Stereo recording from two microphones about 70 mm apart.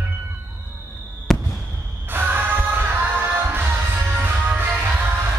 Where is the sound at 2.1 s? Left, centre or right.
Right.